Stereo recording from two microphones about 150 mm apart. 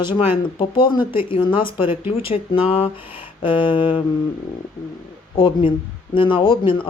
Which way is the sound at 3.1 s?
35° left (ahead or behind).